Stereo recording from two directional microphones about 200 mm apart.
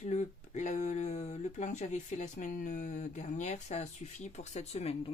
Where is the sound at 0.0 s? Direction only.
35° left (ahead or behind).